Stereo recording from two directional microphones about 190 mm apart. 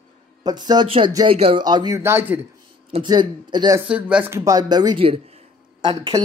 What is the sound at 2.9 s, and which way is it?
Speech, 25° right (ahead or behind).